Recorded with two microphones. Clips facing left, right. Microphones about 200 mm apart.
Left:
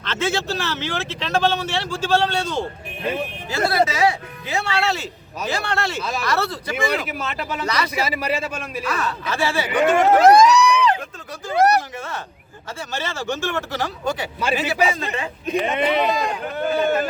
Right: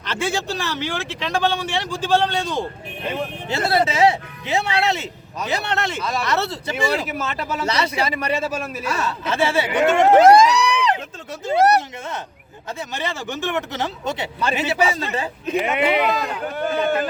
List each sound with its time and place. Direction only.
0.0 s speech: 10° right (ahead or behind)
3.0 s speech: 10° left (ahead or behind)
3.5 s speech: 25° right (ahead or behind)
7.1 s speech: centre (ahead or behind)
7.7 s speech: 25° right (ahead or behind)
8.0 s speech: 5° left (ahead or behind)
8.9 s speech: 25° right (ahead or behind)
11.4 s a sound: 20° right (ahead or behind)
12.9 s speech: 15° right (ahead or behind); by 15.3 s 30° right (ahead or behind)
15.5 s speech: 15° right (ahead or behind)
16.0 s speech: 20° left (ahead or behind)